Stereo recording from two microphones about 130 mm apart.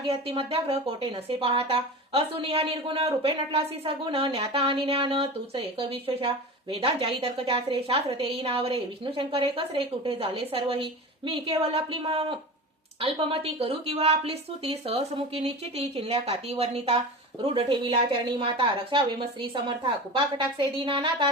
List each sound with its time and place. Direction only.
0.0 s speech: 45° right (ahead or behind)